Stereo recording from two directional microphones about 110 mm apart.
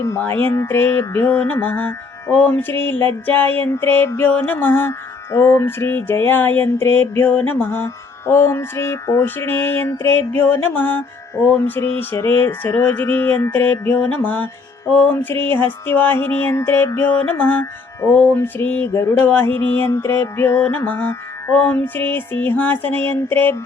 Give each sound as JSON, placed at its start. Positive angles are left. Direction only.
{"t": 0.0, "sound": "mantra", "side_deg": 25}
{"t": 3.7, "sound": "music", "side_deg": 20}
{"t": 4.1, "sound": "mantra", "side_deg": 15}
{"t": 14.9, "sound": "music", "side_deg": 15}